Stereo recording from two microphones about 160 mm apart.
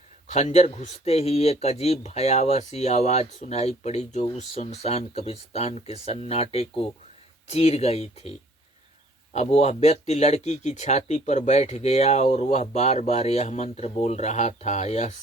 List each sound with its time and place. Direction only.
0.3 s speech: 45° left (ahead or behind)
9.3 s speech: 45° left (ahead or behind)